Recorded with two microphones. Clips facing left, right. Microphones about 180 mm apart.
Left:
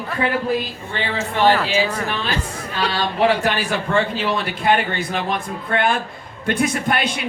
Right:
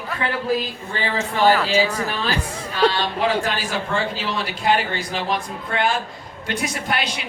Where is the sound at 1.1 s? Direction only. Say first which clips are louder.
Left 1 dB; centre (ahead or behind).